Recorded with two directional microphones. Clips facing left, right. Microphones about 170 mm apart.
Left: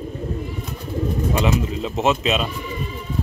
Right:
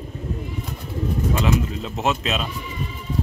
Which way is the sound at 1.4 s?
Centre (ahead or behind).